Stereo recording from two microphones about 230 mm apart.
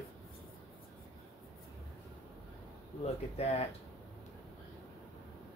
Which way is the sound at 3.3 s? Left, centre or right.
Left.